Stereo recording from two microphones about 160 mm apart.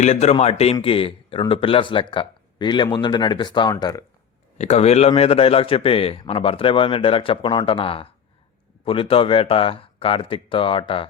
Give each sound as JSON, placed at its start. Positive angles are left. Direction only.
{"t": 0.0, "sound": "speech", "side_deg": 45}
{"t": 4.5, "sound": "speech", "side_deg": 45}